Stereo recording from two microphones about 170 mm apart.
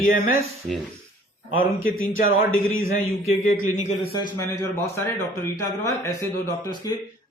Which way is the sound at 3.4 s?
50° left (ahead or behind).